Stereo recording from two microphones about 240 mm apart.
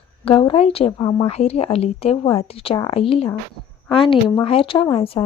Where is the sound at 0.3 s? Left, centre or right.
Left.